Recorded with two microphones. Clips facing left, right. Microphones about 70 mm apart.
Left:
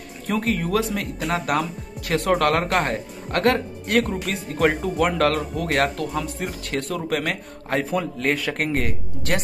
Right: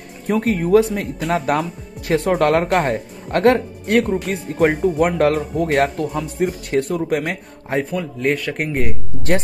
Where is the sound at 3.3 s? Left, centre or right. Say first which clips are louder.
Right 5 dB; right.